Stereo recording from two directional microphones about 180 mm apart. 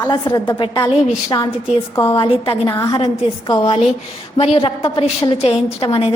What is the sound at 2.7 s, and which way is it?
A woman's voice, 15° left (ahead or behind).